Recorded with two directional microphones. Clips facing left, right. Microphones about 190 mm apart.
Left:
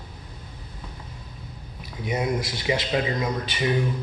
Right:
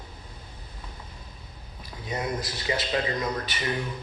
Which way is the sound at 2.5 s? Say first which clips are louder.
Left 3 dB; 25° left (ahead or behind).